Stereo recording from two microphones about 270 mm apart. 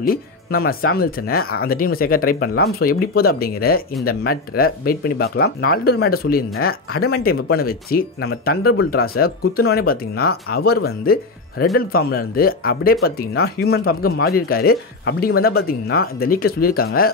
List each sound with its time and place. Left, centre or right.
0.0 s speech: left